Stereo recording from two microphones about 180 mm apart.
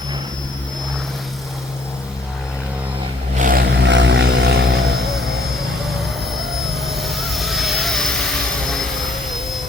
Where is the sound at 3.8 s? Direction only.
80° right.